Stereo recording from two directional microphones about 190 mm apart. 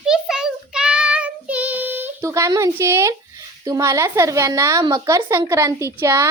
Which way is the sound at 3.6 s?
15° right (ahead or behind).